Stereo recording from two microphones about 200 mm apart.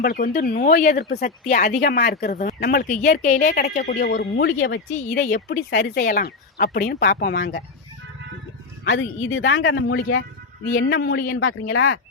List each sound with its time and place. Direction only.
0.0 s speech: 45° left (ahead or behind); by 4.8 s 65° left (ahead or behind)
5.0 s speech: 45° left (ahead or behind)
6.0 s speech: 45° left (ahead or behind)
8.8 s speech: 70° left (ahead or behind)
10.7 s speech: 45° left (ahead or behind)
11.7 s speech: 70° left (ahead or behind)